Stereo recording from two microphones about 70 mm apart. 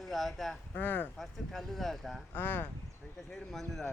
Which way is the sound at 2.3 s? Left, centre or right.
Left.